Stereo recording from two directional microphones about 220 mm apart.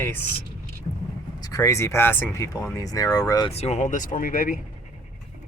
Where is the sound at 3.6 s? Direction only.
30° left (ahead or behind).